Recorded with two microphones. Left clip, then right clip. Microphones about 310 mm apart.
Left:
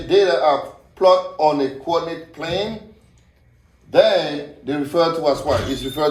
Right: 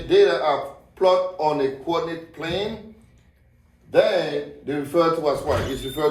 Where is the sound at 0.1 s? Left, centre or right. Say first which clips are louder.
Left 2 dB; centre.